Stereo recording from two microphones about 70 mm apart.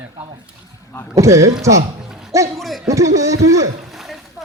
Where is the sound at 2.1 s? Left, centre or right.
Centre.